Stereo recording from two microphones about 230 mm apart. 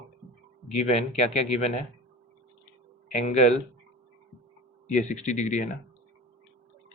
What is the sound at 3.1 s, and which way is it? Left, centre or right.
Speech, left.